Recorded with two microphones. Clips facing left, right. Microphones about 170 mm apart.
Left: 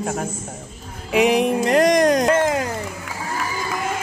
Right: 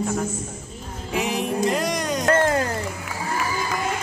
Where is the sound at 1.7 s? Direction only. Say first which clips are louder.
Left 9 dB; 90° left.